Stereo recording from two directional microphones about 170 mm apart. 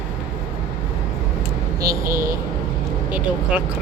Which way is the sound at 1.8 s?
20° right (ahead or behind).